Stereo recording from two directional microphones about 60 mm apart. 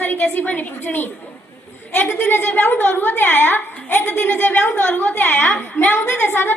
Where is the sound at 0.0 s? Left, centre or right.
Left.